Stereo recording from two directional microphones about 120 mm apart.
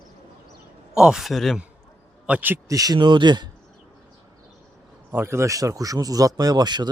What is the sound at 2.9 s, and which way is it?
Speech, 40° right (ahead or behind).